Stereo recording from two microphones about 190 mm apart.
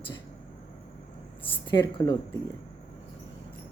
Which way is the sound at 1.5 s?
30° left (ahead or behind).